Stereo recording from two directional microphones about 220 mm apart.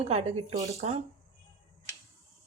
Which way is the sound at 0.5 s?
15° right (ahead or behind).